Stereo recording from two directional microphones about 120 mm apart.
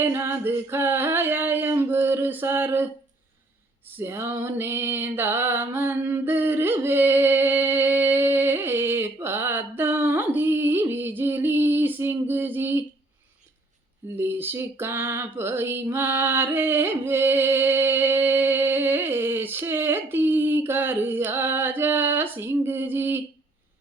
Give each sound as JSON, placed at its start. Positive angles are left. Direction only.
{"t": 0.0, "sound": "a sound", "side_deg": -20}
{"t": 3.9, "sound": "music", "side_deg": -20}
{"t": 14.2, "sound": "female singing", "side_deg": -15}